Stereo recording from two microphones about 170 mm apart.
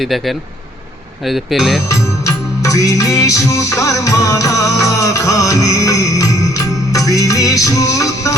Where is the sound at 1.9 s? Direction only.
20° left (ahead or behind).